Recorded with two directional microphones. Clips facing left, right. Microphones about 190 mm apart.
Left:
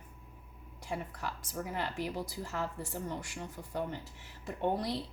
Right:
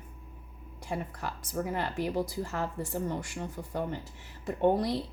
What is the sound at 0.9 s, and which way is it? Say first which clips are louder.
Speech: right 3 dB; 45° right (ahead or behind).